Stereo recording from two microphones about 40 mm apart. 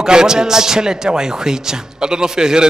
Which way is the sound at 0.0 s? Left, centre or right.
Centre.